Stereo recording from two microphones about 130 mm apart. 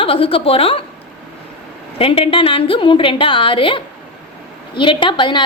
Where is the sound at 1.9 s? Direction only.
45° left (ahead or behind).